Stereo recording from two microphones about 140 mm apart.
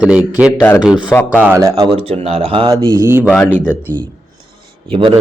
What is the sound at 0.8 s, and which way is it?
Speech, 5° right (ahead or behind).